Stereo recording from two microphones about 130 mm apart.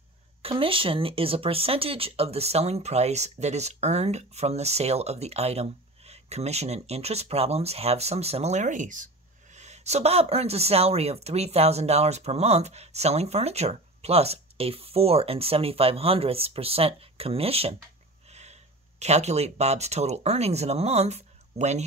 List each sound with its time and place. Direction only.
0.4 s speech: 45° right (ahead or behind)